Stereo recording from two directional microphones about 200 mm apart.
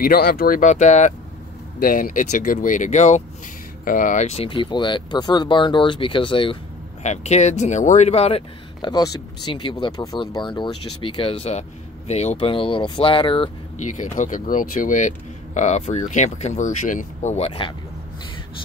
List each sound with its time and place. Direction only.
0.0 s speech: 50° left (ahead or behind); by 17.7 s 30° left (ahead or behind)